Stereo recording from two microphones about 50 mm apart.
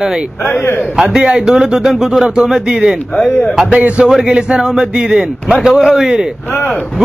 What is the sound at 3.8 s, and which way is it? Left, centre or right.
Speech, right.